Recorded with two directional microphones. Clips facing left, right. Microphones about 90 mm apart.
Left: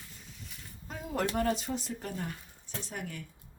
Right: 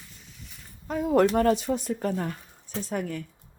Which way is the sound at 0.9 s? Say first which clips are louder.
Right 12 dB; 80° right.